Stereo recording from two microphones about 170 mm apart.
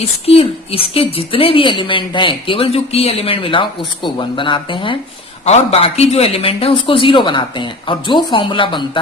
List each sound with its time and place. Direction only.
0.0 s a woman's voice: 35° left (ahead or behind)